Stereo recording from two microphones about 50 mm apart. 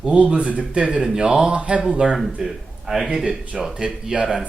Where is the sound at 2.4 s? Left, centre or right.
Centre.